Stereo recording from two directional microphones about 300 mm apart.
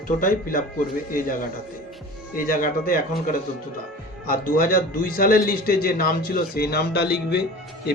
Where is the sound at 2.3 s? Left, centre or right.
Left.